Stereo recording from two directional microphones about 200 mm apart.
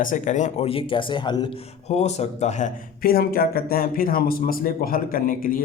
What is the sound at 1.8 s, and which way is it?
Speech, 35° left (ahead or behind).